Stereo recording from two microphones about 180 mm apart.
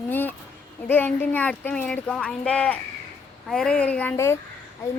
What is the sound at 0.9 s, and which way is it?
Speech, 10° left (ahead or behind).